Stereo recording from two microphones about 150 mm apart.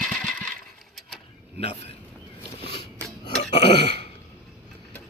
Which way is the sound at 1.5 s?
40° left (ahead or behind).